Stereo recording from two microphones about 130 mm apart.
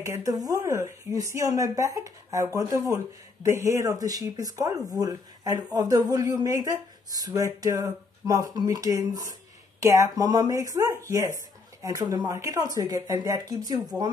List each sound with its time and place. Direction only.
0.0 s speech: 25° right (ahead or behind)